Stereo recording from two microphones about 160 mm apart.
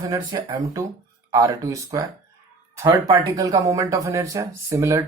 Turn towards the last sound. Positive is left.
turn(degrees=-15)  # may be behind; listen again after turning